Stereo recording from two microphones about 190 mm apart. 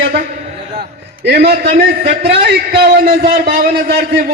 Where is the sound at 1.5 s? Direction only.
55° right (ahead or behind).